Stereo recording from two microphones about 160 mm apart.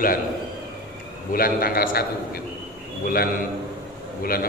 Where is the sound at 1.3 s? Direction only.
65° left (ahead or behind).